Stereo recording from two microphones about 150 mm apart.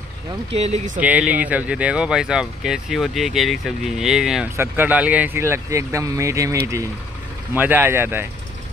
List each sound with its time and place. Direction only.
0.6 s speech: 45° right (ahead or behind)
0.9 s speech: 10° right (ahead or behind)